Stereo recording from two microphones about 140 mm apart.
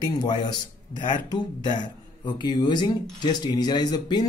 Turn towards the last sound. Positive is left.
turn(degrees=30)  # may be behind; listen again after turning